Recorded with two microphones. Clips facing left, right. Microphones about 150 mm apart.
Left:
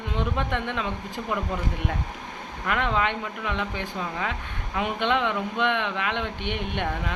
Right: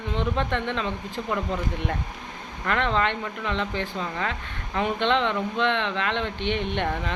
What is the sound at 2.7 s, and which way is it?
Speech, 10° left (ahead or behind).